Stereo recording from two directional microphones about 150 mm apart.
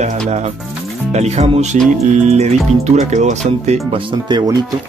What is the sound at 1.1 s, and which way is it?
Speech, 45° right (ahead or behind).